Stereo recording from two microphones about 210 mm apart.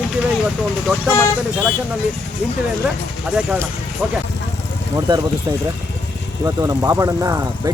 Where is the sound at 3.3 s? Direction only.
5° right (ahead or behind).